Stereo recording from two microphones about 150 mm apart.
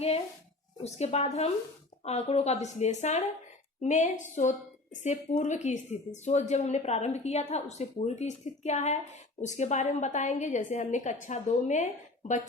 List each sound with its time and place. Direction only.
0.8 s a woman's voice: 45° left (ahead or behind)